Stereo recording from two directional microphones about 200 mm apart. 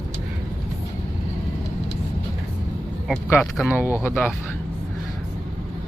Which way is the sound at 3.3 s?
5° left (ahead or behind).